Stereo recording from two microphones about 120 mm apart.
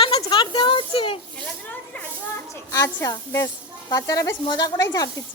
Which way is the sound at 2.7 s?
30° left (ahead or behind).